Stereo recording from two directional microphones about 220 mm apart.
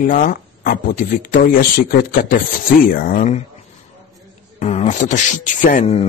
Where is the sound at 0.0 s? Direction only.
40° left (ahead or behind).